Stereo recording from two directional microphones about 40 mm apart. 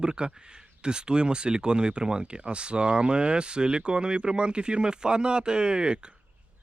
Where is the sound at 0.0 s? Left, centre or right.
Right.